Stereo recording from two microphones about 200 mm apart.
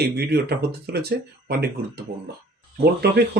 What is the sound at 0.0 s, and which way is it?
Speech, 55° right (ahead or behind).